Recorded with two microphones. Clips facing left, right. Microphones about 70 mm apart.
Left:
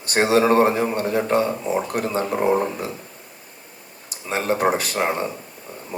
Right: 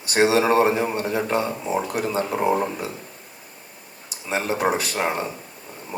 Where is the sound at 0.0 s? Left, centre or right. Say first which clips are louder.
Left 1 dB; left.